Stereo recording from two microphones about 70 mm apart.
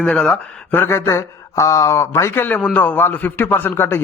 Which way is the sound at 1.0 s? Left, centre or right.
Left.